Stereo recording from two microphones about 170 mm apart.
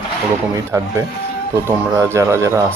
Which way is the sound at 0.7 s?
15° right (ahead or behind).